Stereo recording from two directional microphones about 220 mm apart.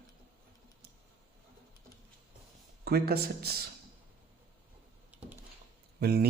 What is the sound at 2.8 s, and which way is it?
Speech, 45° right (ahead or behind).